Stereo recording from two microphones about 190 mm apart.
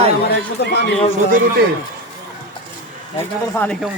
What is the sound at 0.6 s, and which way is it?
Speech, 60° left (ahead or behind).